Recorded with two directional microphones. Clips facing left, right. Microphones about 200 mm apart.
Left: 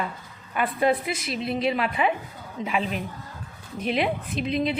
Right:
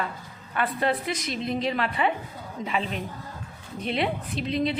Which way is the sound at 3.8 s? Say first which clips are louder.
Left 2 dB; 30° right (ahead or behind).